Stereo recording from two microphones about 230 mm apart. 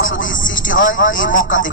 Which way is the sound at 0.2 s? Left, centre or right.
Left.